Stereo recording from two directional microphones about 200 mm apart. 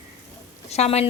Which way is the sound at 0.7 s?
30° left (ahead or behind).